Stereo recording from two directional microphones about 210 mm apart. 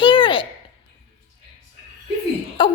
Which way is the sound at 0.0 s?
25° left (ahead or behind).